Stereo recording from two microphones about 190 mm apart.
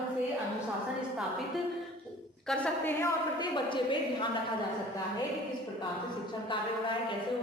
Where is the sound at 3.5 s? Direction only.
25° left (ahead or behind).